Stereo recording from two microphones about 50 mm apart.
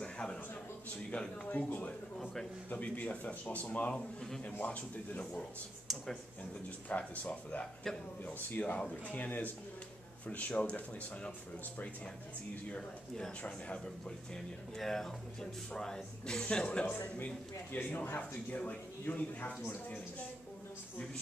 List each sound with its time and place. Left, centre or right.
0.0 s a sound: centre
1.1 s speech: centre
1.5 s speech: left
3.9 s speech: centre
4.6 s speech: left
6.9 s speech: left
13.4 s speech: left
17.7 s speech: left